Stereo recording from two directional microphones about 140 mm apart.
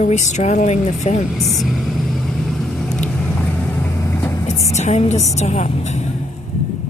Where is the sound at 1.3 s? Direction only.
Centre (ahead or behind); by 4.4 s 20° left (ahead or behind).